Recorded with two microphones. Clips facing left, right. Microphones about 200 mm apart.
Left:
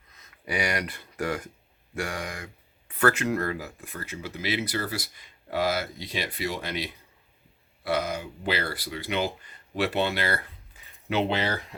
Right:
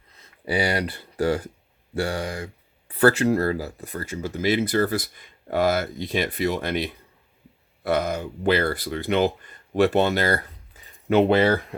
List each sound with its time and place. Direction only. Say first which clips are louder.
0.1 s speech: right 6 dB; 30° right (ahead or behind); by 11.6 s 50° right (ahead or behind)